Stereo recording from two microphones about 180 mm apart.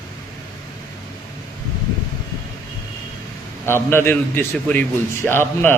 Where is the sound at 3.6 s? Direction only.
15° left (ahead or behind).